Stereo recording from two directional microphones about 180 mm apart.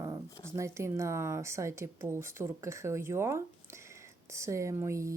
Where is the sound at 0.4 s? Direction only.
15° right (ahead or behind).